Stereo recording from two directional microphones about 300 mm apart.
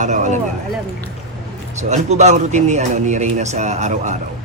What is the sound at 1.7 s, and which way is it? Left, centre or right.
A man's voice, right.